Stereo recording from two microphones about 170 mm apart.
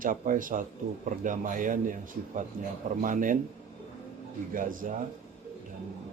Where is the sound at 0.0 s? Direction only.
55° right (ahead or behind).